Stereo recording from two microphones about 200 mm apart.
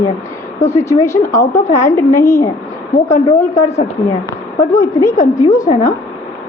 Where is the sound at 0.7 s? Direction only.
15° left (ahead or behind).